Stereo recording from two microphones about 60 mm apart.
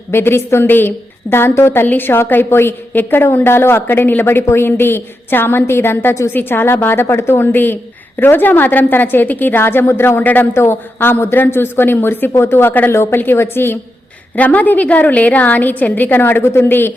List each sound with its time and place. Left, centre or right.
0.1 s a woman's voice: left
10.5 s a woman's voice: left
14.3 s a woman's voice: left
16.4 s a woman's voice: left